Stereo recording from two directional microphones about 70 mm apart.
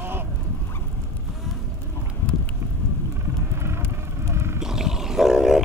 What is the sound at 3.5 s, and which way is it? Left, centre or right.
Vehicle, right.